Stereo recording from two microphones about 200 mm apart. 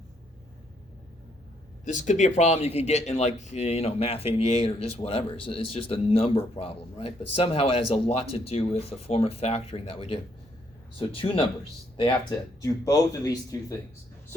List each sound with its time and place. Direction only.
1.8 s speech: 40° left (ahead or behind)
12.6 s speech: 15° left (ahead or behind)